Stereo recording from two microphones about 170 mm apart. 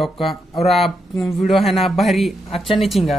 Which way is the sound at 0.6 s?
Centre (ahead or behind).